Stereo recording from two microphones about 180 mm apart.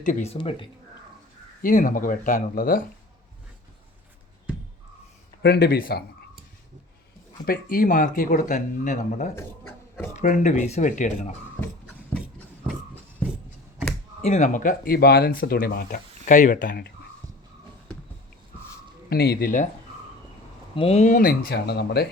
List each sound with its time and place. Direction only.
0.0 s speech: 40° left (ahead or behind)
1.6 s speech: 50° left (ahead or behind)
5.4 s speech: 65° left (ahead or behind)
7.4 s speech: 55° left (ahead or behind)
9.3 s a sound: 15° left (ahead or behind)
10.2 s speech: 45° left (ahead or behind)
13.2 s a sound: 10° left (ahead or behind)
14.2 s speech: 40° left (ahead or behind); by 16.9 s 55° left (ahead or behind)
19.1 s speech: 60° left (ahead or behind)
20.7 s speech: 35° left (ahead or behind); by 22.0 s 65° left (ahead or behind)